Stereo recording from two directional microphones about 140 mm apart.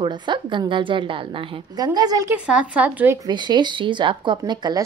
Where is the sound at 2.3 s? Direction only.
10° right (ahead or behind).